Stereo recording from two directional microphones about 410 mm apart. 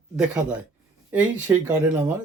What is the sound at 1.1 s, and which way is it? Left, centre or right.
Speech, centre.